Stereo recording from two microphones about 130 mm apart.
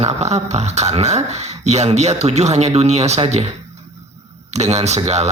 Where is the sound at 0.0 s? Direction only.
55° right (ahead or behind).